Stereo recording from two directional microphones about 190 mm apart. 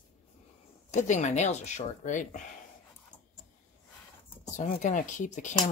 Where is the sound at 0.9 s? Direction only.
40° left (ahead or behind).